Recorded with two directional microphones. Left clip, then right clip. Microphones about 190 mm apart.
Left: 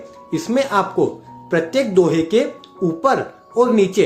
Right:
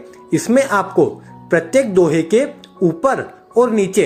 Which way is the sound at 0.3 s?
35° right (ahead or behind).